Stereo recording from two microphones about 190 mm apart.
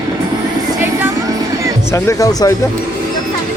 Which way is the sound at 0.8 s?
15° right (ahead or behind).